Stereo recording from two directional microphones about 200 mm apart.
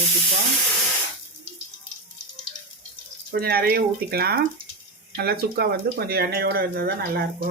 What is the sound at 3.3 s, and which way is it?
Speech, 50° right (ahead or behind).